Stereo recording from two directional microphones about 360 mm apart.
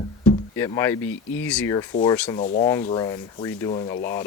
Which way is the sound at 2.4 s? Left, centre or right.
Centre.